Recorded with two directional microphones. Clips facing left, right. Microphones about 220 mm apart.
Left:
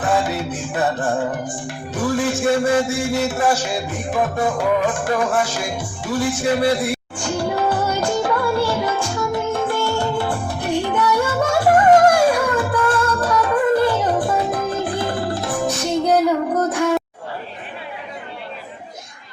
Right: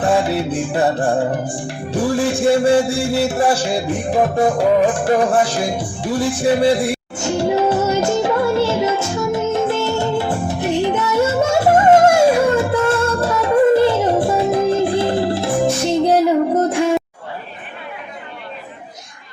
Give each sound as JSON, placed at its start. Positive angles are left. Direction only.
{"t": 0.0, "sound": "music", "side_deg": -30}